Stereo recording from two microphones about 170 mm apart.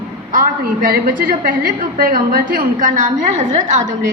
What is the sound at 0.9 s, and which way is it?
A woman's voice, 55° right (ahead or behind).